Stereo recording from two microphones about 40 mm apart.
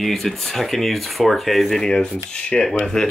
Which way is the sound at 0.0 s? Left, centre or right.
Centre.